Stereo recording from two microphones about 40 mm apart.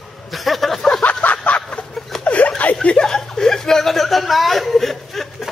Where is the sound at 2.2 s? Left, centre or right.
Left.